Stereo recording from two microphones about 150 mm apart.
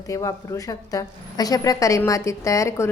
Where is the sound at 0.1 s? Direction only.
20° left (ahead or behind).